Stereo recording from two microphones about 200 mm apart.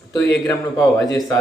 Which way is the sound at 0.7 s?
15° left (ahead or behind).